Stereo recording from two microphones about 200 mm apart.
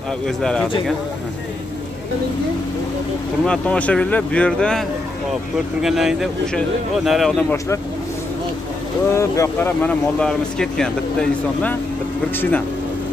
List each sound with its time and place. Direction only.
0.4 s speech: 5° left (ahead or behind)
3.4 s speech: 5° left (ahead or behind)
9.1 s speech: 15° left (ahead or behind)